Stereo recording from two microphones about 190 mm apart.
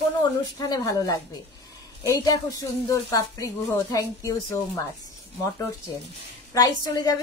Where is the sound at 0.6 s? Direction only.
20° left (ahead or behind).